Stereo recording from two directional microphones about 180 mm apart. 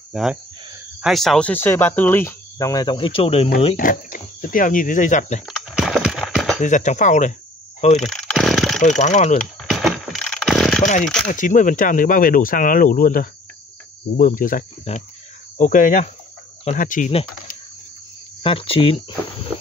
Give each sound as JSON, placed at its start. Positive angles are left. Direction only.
{"t": 0.1, "sound": "speech", "side_deg": 0}
{"t": 3.7, "sound": "speech", "side_deg": 50}
{"t": 5.5, "sound": "a sound", "side_deg": 0}
{"t": 6.6, "sound": "speech", "side_deg": 45}
{"t": 8.0, "sound": "chainsaw", "side_deg": 0}
{"t": 8.8, "sound": "speech", "side_deg": 40}
{"t": 9.4, "sound": "a sound", "side_deg": 0}
{"t": 11.2, "sound": "speech", "side_deg": 45}
{"t": 18.4, "sound": "speech", "side_deg": 30}